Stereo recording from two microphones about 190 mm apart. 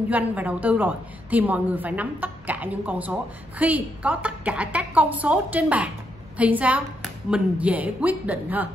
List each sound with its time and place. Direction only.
0.1 s a woman's voice: 10° right (ahead or behind)